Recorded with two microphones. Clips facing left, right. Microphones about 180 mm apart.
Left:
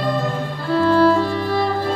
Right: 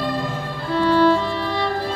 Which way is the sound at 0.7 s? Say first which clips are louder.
Left 2 dB; 40° left (ahead or behind).